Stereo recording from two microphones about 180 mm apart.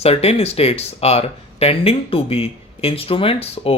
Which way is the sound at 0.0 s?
35° left (ahead or behind).